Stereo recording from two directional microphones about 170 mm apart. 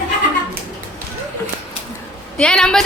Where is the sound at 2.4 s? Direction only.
5° left (ahead or behind).